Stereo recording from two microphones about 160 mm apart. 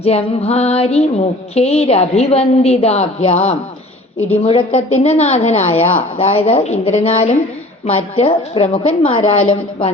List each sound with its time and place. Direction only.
0.0 s a woman's voice: 40° left (ahead or behind)